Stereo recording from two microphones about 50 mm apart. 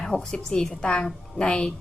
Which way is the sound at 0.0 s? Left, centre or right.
Centre.